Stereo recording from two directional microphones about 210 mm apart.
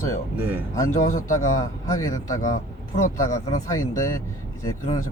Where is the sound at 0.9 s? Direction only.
35° left (ahead or behind).